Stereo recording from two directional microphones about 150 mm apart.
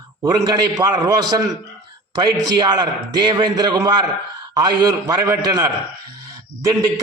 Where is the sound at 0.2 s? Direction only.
25° right (ahead or behind).